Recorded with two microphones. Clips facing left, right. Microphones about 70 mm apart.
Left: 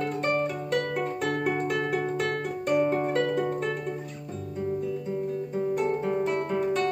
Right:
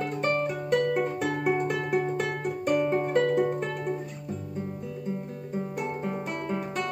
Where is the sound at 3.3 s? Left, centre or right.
Centre.